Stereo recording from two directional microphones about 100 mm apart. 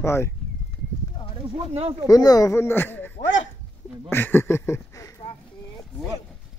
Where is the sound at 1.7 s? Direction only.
70° right (ahead or behind).